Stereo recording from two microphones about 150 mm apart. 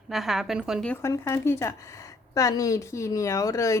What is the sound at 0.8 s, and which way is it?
Speech, 10° left (ahead or behind).